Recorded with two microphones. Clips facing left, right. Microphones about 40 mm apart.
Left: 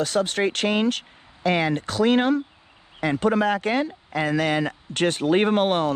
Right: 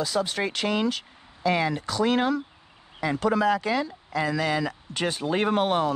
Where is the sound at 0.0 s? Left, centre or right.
Left.